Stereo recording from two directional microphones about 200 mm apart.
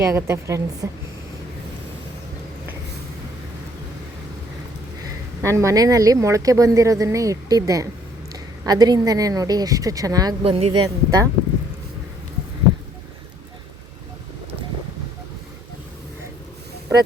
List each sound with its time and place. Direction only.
0.0 s a woman's voice: 15° right (ahead or behind)
5.4 s a woman's voice: 15° right (ahead or behind)
10.8 s a woman's voice: 15° right (ahead or behind)